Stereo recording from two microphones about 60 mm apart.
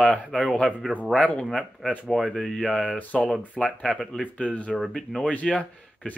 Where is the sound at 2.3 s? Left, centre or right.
Centre.